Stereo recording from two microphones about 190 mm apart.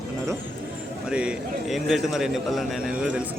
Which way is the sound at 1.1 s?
5° right (ahead or behind).